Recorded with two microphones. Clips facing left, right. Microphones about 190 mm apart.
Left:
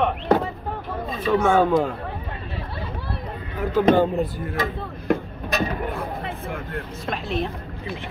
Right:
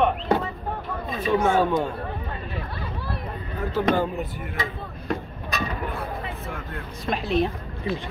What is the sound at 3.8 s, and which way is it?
Speech, 30° left (ahead or behind).